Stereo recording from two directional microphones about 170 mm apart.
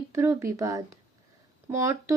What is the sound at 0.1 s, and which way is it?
Speech, 15° right (ahead or behind).